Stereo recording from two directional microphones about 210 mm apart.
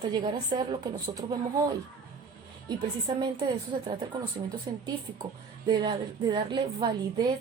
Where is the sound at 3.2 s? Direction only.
20° right (ahead or behind).